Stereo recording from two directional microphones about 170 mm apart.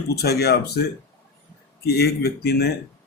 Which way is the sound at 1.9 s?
70° left (ahead or behind).